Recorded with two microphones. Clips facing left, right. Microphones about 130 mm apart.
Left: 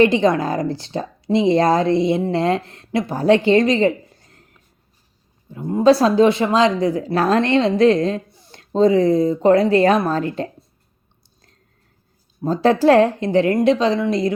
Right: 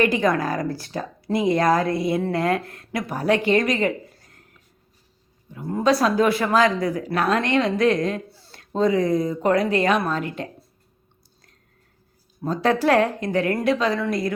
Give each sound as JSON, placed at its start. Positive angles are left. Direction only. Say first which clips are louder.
{"t": 0.0, "sound": "speech", "louder": "left 5 dB", "side_deg": 25}
{"t": 5.5, "sound": "speech", "louder": "left 6 dB", "side_deg": 25}
{"t": 8.6, "sound": "speech", "louder": "left 6 dB", "side_deg": 30}
{"t": 12.5, "sound": "speech", "louder": "left 5 dB", "side_deg": 30}